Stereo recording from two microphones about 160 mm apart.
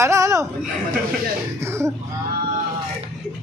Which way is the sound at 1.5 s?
15° right (ahead or behind).